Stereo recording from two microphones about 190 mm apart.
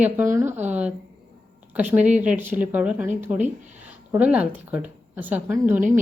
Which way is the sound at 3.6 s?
40° right (ahead or behind).